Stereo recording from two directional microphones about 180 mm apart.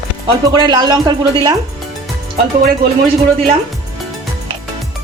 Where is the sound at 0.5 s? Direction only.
25° right (ahead or behind).